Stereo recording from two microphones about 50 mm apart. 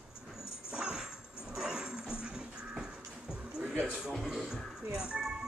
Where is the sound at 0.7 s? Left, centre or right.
Centre.